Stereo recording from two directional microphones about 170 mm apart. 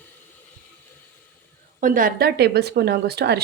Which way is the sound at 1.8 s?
55° right (ahead or behind).